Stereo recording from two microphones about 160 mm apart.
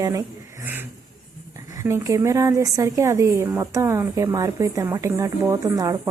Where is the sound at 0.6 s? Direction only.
15° right (ahead or behind).